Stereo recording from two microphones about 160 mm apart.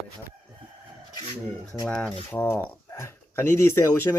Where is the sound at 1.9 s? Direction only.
5° left (ahead or behind).